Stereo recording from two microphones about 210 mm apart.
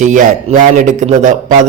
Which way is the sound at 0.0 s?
35° right (ahead or behind).